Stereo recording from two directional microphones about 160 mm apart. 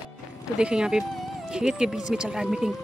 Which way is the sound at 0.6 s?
5° right (ahead or behind).